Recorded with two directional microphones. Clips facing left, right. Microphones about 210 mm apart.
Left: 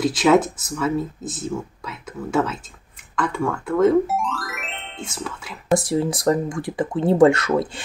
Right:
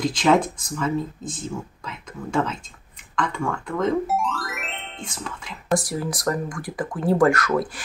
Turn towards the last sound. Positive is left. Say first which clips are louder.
# left 2 dB
turn(degrees=25)  # may be behind; listen again after turning